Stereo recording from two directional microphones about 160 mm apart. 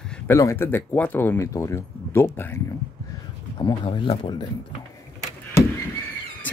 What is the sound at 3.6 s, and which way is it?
Speech, 25° left (ahead or behind).